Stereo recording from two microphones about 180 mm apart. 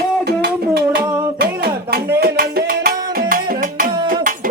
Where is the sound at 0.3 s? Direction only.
60° right (ahead or behind).